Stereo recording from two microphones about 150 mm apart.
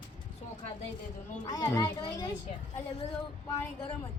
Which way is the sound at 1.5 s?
25° left (ahead or behind).